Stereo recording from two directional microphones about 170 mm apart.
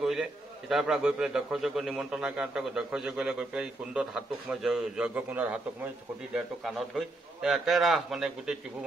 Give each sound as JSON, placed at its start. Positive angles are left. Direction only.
{"t": 0.0, "sound": "a man's voice", "side_deg": 0}